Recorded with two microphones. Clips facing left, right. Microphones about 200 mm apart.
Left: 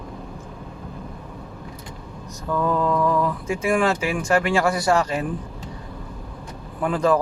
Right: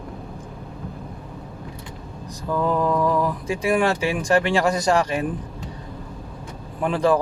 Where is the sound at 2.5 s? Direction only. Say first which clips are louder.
Even; 15° right (ahead or behind).